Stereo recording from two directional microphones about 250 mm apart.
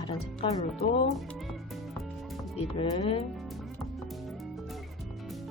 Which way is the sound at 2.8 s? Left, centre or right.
Left.